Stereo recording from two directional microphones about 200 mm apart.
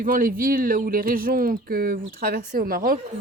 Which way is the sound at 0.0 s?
45° right (ahead or behind).